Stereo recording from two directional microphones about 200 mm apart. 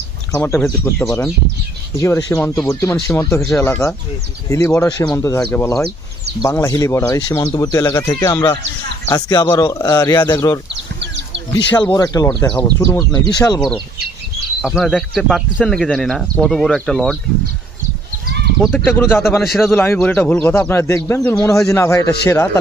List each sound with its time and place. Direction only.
0.3 s speech: 10° left (ahead or behind)
10.7 s a sound: 60° right (ahead or behind)
11.8 s speech: 15° left (ahead or behind)
14.6 s speech: centre (ahead or behind)
18.9 s speech: 10° left (ahead or behind)